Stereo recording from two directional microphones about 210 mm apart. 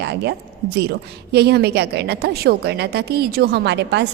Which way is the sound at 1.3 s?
50° right (ahead or behind).